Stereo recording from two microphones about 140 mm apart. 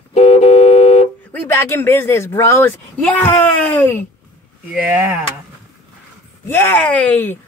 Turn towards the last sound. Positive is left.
turn(degrees=10)  # may be behind; listen again after turning